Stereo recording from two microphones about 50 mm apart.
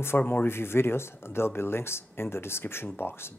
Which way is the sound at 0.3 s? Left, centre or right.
Left.